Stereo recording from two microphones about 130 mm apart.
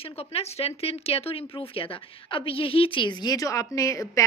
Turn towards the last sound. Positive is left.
turn(degrees=25)  # may be behind; listen again after turning